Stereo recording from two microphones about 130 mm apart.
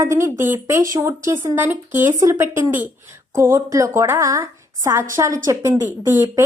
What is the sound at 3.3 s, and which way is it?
A woman's voice, 20° right (ahead or behind).